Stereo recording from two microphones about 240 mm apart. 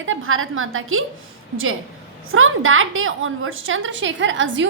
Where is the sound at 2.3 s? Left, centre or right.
Right.